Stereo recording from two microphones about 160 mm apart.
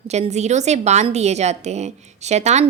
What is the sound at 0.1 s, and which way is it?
A woman's voice, 45° right (ahead or behind).